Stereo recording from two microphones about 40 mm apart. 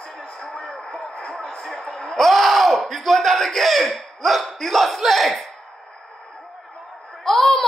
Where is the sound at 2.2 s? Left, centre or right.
Centre.